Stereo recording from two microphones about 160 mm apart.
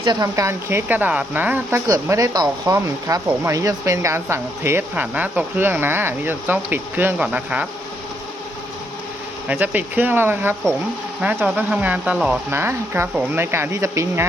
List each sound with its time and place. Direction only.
0.0 s speech: 25° right (ahead or behind)
1.9 s speech: 20° right (ahead or behind)
9.5 s speech: 10° right (ahead or behind)